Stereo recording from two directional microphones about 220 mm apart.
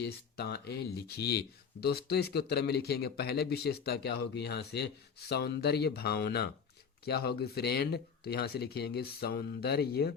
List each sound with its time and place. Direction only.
0.0 s speech: 45° left (ahead or behind)